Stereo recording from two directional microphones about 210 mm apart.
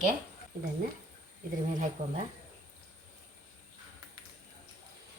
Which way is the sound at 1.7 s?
40° right (ahead or behind).